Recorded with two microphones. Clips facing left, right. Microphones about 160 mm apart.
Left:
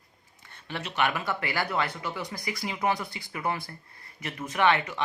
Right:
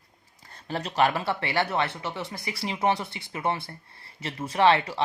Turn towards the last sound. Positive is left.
turn(degrees=-30)  # may be behind; listen again after turning